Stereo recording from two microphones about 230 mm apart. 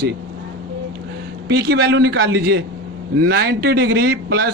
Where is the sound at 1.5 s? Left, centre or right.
Right.